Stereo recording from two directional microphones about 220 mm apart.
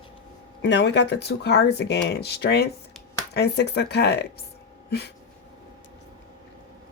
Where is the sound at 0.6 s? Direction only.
55° left (ahead or behind).